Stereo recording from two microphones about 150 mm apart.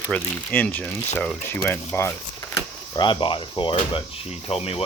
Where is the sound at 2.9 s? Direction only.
30° left (ahead or behind).